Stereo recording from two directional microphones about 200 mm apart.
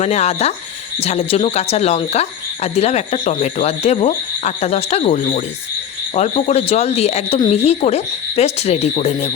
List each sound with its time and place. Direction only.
0.0 s speech: 35° left (ahead or behind)